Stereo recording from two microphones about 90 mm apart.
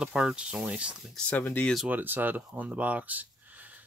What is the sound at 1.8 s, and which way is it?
Speech, 20° right (ahead or behind).